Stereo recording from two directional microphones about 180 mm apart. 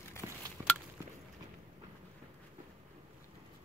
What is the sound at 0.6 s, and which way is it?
Chop, 10° right (ahead or behind).